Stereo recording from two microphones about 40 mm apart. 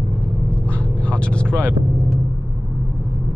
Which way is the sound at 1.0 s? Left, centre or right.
Left.